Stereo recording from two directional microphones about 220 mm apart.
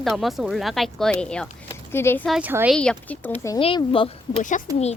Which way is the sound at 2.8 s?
5° left (ahead or behind).